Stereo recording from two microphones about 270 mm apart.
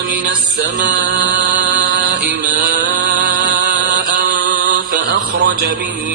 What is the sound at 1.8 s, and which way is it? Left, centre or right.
Mantra, right.